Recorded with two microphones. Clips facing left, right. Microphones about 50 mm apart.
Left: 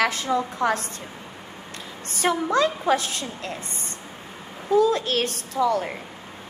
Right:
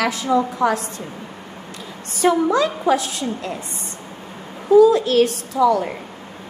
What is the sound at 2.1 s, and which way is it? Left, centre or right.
A woman's voice, left.